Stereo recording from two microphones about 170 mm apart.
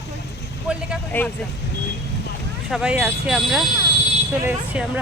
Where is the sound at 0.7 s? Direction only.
5° right (ahead or behind).